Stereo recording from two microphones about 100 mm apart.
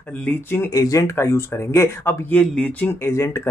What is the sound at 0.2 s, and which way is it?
Speech, 20° left (ahead or behind).